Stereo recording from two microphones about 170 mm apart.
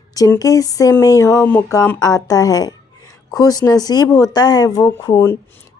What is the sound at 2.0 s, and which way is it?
A woman's voice, 20° left (ahead or behind).